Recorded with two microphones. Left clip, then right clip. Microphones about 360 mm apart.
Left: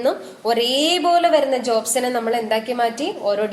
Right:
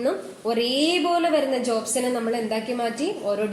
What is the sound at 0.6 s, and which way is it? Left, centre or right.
A woman's voice, left.